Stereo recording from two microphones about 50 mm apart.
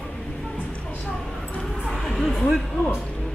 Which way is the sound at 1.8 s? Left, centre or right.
Centre.